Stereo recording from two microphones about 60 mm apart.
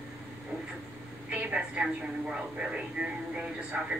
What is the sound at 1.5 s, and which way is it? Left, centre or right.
A woman's voice, centre.